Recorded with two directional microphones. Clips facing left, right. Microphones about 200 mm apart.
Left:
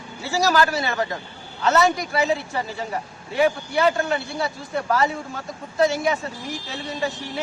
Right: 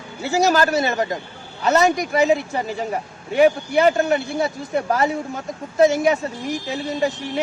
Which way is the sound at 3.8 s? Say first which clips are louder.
Right 4 dB; 20° right (ahead or behind).